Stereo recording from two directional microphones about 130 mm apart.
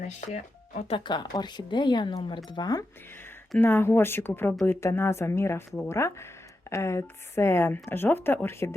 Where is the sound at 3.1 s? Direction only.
15° left (ahead or behind).